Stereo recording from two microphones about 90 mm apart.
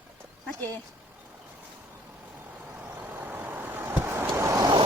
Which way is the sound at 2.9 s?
20° right (ahead or behind).